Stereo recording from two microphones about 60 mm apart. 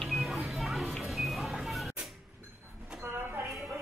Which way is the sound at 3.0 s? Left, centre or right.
Right.